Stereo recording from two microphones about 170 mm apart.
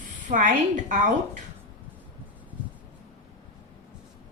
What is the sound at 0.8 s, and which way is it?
Speech, 50° right (ahead or behind).